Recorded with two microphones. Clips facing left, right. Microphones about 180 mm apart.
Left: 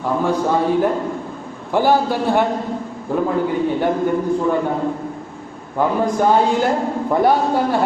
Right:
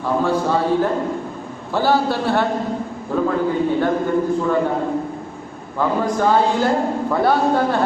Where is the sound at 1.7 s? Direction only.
15° left (ahead or behind).